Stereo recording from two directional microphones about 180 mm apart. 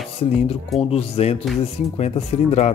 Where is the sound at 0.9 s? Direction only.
35° left (ahead or behind).